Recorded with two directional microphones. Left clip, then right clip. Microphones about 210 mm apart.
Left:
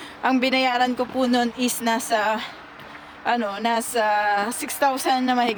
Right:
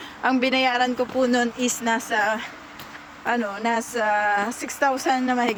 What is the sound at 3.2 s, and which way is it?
A woman's voice, 10° left (ahead or behind).